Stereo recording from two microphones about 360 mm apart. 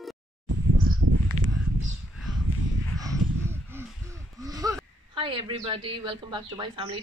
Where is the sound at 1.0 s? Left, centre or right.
Right.